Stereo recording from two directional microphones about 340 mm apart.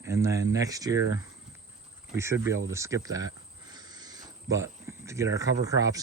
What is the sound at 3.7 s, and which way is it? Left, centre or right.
Cricket, centre.